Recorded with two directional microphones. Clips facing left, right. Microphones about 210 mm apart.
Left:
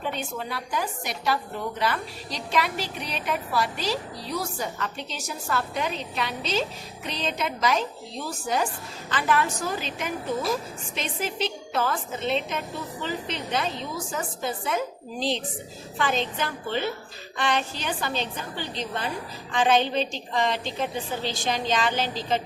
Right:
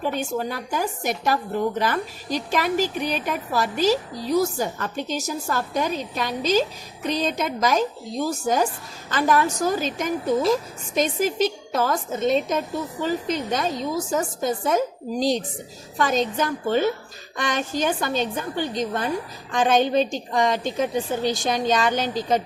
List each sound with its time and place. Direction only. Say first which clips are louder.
0.1 s a woman's voice: right 6 dB; 45° right (ahead or behind)
2.6 s a woman's voice: right 4 dB; 45° right (ahead or behind)